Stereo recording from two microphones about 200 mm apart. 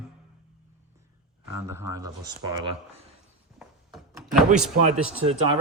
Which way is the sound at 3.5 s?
Centre (ahead or behind).